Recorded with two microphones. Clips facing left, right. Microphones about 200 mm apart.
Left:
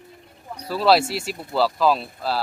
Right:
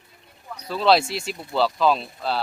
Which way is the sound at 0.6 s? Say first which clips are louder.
Left 1 dB; 5° left (ahead or behind).